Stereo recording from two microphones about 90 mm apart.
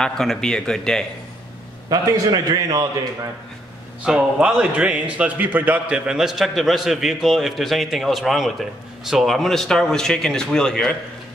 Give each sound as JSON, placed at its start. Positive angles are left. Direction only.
{"t": 0.0, "sound": "speech", "side_deg": 5}
{"t": 1.9, "sound": "a man's voice", "side_deg": -45}
{"t": 4.0, "sound": "a man's voice", "side_deg": -10}